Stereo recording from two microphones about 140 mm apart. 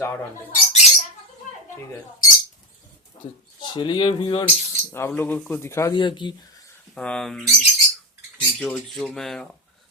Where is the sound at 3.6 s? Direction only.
35° left (ahead or behind).